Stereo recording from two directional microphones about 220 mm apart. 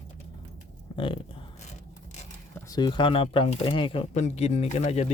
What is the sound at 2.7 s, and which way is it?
Speech, 20° left (ahead or behind).